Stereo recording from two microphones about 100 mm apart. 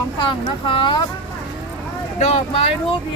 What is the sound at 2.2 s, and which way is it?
Speech, 90° left.